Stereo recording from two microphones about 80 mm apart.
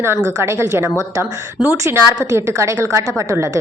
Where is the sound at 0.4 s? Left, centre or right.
Right.